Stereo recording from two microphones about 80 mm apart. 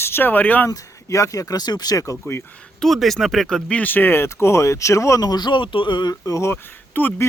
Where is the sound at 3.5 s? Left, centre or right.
Centre; by 5.3 s left.